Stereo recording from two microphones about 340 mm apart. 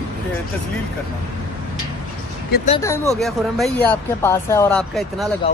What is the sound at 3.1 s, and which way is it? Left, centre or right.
Speech, centre.